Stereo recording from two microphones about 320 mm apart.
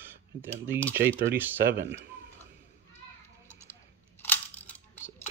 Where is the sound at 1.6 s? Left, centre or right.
Right.